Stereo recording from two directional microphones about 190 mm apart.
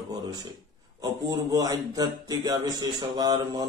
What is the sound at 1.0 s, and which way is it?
A man's voice, 20° right (ahead or behind).